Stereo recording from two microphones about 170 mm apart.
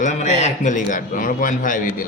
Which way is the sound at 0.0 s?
45° left (ahead or behind).